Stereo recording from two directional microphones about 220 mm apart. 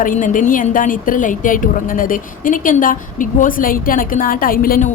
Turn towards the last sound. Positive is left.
turn(degrees=40)  # may be behind; listen again after turning